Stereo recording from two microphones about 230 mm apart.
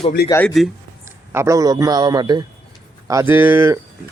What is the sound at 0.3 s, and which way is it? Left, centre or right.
Speech, centre.